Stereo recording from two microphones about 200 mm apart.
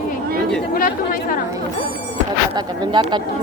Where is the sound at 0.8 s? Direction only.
45° left (ahead or behind).